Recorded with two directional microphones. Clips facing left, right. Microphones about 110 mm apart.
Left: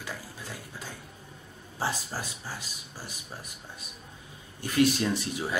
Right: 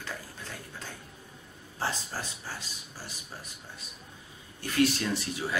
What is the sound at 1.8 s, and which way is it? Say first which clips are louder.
Speech: left 2 dB; 10° left (ahead or behind).